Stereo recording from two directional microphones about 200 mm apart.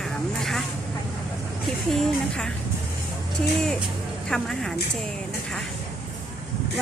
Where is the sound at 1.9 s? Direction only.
Centre (ahead or behind).